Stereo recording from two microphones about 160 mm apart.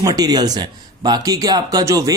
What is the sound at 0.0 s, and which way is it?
Speech, 25° right (ahead or behind).